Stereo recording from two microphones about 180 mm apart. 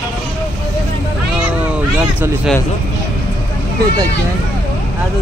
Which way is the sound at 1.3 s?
5° right (ahead or behind).